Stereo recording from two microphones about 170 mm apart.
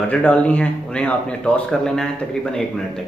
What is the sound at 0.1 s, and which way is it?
Speech, 10° left (ahead or behind).